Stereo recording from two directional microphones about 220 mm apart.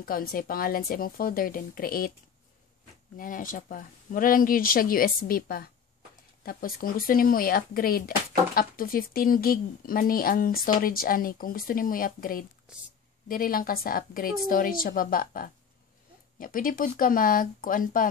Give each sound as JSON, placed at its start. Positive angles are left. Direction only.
{"t": 0.0, "sound": "speech", "side_deg": 40}
{"t": 3.2, "sound": "speech", "side_deg": 40}
{"t": 12.7, "sound": "a woman's voice", "side_deg": -5}
{"t": 13.3, "sound": "speech", "side_deg": 40}